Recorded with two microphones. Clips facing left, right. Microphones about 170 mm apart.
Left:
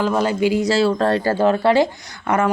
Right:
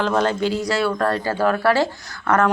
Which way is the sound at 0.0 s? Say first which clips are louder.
Left 2 dB; 10° left (ahead or behind).